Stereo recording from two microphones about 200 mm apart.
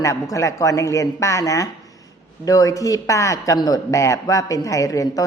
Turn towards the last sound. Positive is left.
turn(degrees=15)  # may be behind; listen again after turning